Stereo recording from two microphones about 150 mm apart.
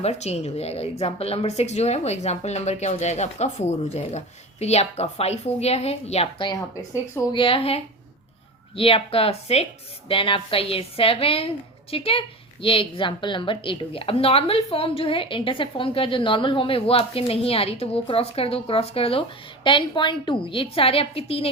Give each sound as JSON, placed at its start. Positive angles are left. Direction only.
{"t": 0.0, "sound": "a woman's voice", "side_deg": 45}